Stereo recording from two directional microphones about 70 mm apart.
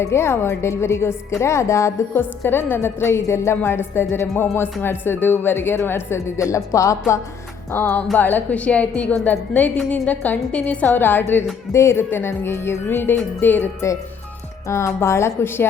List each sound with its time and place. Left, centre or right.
0.0 s a woman's voice: left
2.1 s a woman's voice: left
7.7 s a woman's voice: left
10.9 s a woman's voice: left
14.7 s a woman's voice: left